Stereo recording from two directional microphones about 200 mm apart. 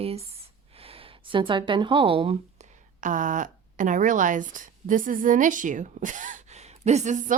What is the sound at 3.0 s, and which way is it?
A woman's voice, 40° right (ahead or behind).